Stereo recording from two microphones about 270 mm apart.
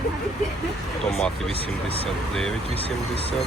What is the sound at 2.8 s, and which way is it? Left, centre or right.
Speech, left.